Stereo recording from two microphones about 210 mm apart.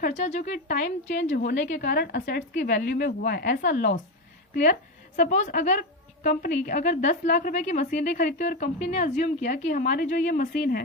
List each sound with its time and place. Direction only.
0.2 s a woman's voice: 35° left (ahead or behind)
1.0 s a woman's voice: 60° left (ahead or behind)
1.5 s a woman's voice: 40° left (ahead or behind)